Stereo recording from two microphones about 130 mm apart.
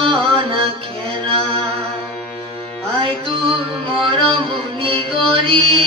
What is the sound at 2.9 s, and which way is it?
Music, 40° right (ahead or behind).